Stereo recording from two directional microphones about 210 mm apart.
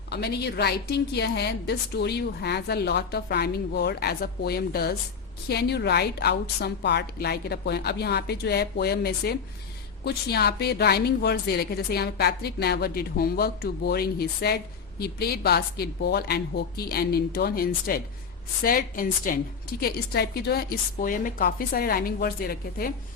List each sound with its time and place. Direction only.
0.1 s a woman's voice: 50° left (ahead or behind)